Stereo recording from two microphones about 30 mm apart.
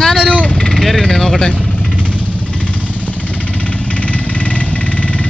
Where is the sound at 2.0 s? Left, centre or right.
Left.